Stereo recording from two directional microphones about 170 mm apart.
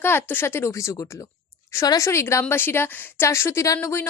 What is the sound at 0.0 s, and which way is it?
A woman's voice, 10° left (ahead or behind).